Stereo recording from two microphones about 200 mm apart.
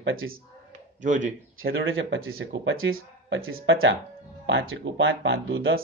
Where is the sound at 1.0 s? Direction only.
40° right (ahead or behind).